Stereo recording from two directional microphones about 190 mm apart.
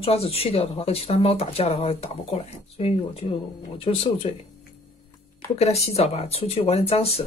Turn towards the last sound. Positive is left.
turn(degrees=30)  # may be behind; listen again after turning